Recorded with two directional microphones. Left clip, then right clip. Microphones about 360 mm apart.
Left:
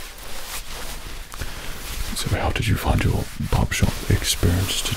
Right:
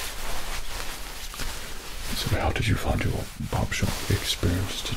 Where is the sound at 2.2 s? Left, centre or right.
Left.